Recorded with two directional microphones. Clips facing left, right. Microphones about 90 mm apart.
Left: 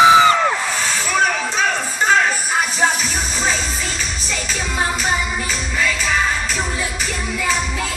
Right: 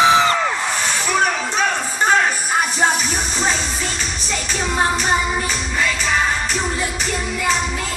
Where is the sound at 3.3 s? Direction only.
20° right (ahead or behind).